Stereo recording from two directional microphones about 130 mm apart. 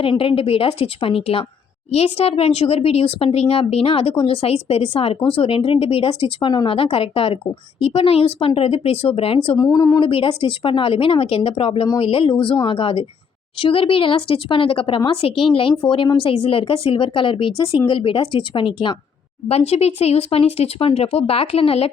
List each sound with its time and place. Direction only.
0.0 s speech: 45° left (ahead or behind)
9.6 s speech: 25° left (ahead or behind)
10.1 s speech: 45° left (ahead or behind)
19.5 s speech: 50° left (ahead or behind)